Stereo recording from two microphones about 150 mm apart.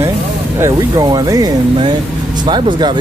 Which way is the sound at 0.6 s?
25° right (ahead or behind).